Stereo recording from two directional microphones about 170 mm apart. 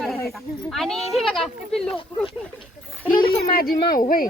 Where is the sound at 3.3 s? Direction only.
60° left (ahead or behind).